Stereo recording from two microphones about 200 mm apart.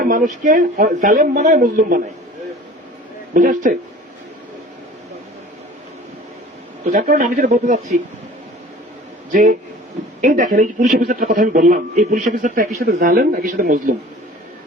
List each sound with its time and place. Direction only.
0.0 s speech: 40° right (ahead or behind)
3.3 s speech: 40° right (ahead or behind)
6.8 s speech: 45° right (ahead or behind)
9.3 s a man's voice: 40° right (ahead or behind)